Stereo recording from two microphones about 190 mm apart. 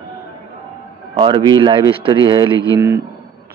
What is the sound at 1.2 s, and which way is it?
Speech, 25° right (ahead or behind).